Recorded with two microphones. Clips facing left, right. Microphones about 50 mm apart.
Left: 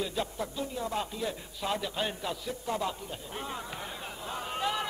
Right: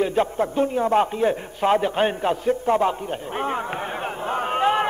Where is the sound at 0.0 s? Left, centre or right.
Right.